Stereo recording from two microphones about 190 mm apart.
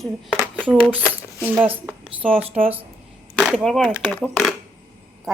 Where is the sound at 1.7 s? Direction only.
5° right (ahead or behind).